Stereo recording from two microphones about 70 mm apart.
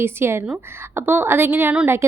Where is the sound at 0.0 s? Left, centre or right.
Right.